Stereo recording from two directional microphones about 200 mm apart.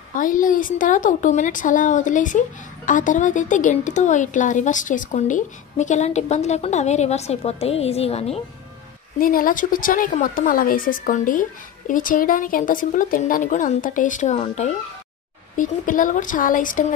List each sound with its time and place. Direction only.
0.2 s a woman's voice: 40° left (ahead or behind)
9.2 s a woman's voice: 45° left (ahead or behind)